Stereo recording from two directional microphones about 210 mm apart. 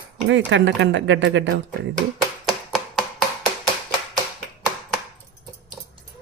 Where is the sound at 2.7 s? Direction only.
Centre (ahead or behind).